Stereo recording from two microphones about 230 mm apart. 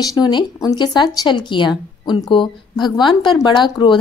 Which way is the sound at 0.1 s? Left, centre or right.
Centre.